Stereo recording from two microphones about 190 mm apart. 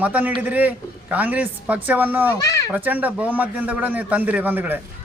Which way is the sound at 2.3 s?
15° left (ahead or behind).